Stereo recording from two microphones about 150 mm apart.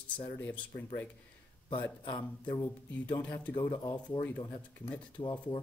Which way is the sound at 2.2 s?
25° left (ahead or behind).